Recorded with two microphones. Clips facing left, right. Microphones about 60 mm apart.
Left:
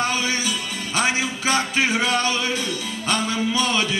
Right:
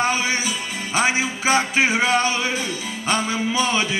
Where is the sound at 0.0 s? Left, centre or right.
Centre.